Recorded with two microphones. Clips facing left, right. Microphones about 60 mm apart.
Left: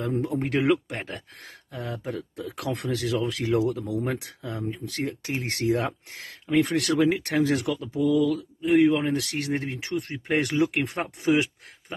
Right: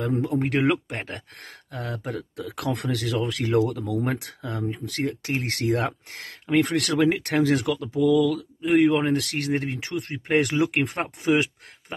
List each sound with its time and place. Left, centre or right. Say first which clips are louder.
0.3 s speech: even; right
1.7 s speech: right 1 dB; right
8.0 s speech: right 2 dB; right
10.2 s speech: right 2 dB; right
11.0 s speech: even; right